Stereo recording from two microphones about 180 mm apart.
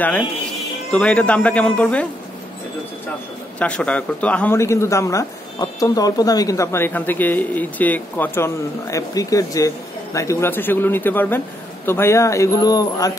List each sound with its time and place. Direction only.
0.9 s speech: 5° left (ahead or behind)
3.5 s speech: 5° left (ahead or behind)